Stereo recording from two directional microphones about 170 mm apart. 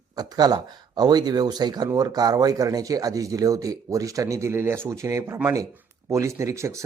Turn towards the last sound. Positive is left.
turn(degrees=-15)  # may be behind; listen again after turning